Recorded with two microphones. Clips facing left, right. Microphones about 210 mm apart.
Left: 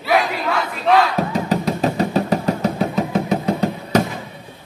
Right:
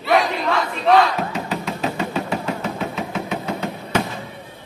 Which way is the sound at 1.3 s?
40° left (ahead or behind).